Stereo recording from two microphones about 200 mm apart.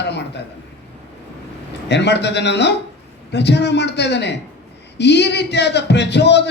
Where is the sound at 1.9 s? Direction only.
60° left (ahead or behind).